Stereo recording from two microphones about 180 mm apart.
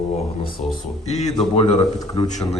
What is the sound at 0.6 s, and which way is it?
Speech, 40° left (ahead or behind).